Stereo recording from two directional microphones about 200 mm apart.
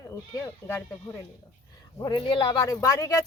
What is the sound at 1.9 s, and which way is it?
A man's voice, 20° left (ahead or behind).